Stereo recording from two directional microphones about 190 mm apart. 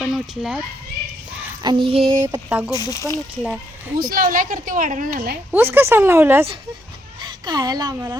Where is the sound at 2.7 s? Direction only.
20° left (ahead or behind).